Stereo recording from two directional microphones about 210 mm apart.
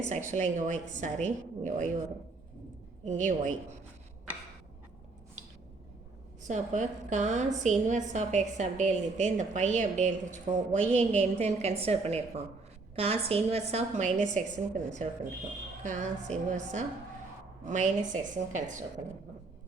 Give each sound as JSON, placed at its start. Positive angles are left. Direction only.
{"t": 0.1, "sound": "a woman's voice", "side_deg": -35}
{"t": 3.0, "sound": "a woman's voice", "side_deg": -35}
{"t": 6.5, "sound": "a woman's voice", "side_deg": -35}